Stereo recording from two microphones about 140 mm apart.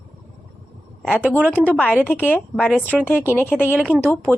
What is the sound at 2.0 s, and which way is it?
Speech, 10° left (ahead or behind).